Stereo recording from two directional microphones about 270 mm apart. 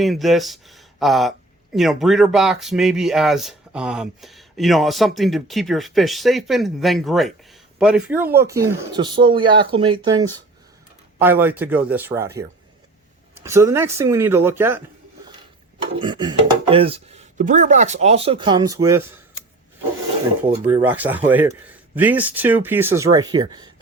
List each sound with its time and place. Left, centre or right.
0.0 s a man's voice: centre
16.0 s speech: centre
20.7 s a man's voice: centre